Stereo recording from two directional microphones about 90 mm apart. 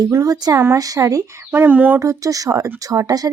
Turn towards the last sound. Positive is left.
turn(degrees=-45)  # may be behind; listen again after turning